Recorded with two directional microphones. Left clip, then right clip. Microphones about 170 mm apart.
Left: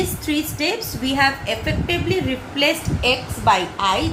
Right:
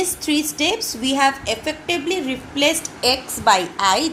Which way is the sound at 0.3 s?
40° right (ahead or behind).